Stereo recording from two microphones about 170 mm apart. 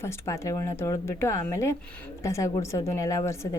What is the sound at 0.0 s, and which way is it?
A woman's voice, 15° left (ahead or behind).